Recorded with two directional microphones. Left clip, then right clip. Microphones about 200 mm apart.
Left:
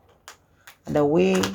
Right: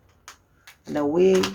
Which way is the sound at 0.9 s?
35° left (ahead or behind).